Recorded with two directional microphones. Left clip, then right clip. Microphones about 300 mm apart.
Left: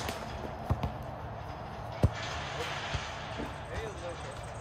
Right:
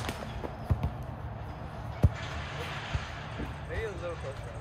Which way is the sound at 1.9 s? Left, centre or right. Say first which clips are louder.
Left 2 dB; left.